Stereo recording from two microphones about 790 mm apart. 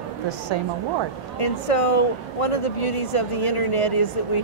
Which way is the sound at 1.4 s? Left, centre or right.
Left.